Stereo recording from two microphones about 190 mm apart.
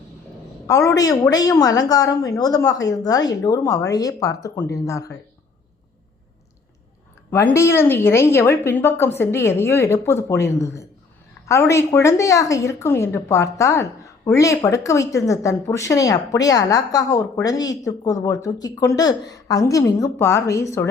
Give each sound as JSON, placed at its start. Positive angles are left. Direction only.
{"t": 0.7, "sound": "a woman's voice", "side_deg": 15}
{"t": 7.3, "sound": "a woman's voice", "side_deg": 10}